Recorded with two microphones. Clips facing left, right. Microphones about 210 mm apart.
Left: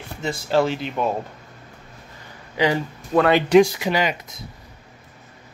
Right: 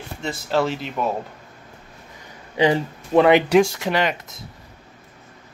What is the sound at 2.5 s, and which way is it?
Speech, 25° right (ahead or behind).